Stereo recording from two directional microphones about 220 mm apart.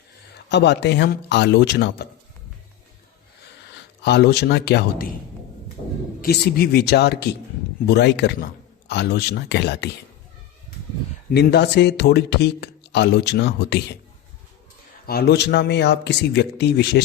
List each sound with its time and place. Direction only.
0.5 s speech: 50° left (ahead or behind)
4.0 s speech: 50° left (ahead or behind)
6.2 s speech: 45° left (ahead or behind)
11.3 s speech: 50° left (ahead or behind)
15.0 s speech: 45° left (ahead or behind)